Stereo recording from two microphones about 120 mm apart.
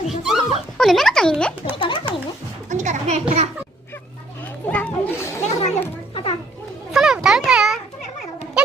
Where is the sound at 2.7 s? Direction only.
90° right.